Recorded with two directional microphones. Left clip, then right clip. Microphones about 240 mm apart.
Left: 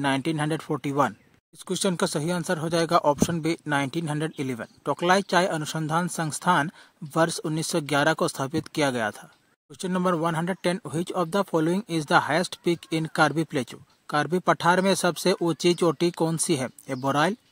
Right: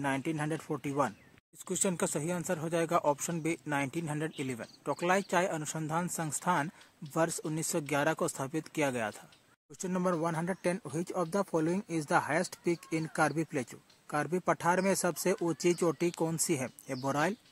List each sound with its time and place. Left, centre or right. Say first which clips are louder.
0.0 s speech: left 8 dB; left
1.7 s speech: left 7 dB; left
5.0 s speech: left 8 dB; left